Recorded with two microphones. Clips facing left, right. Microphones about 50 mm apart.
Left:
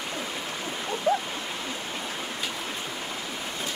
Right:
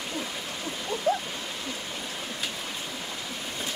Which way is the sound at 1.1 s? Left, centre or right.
Centre.